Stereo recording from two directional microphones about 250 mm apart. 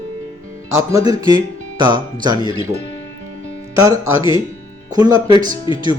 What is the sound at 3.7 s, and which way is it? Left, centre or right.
Speech, centre.